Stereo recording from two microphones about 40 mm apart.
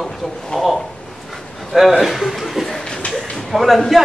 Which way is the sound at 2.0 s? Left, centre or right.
Centre.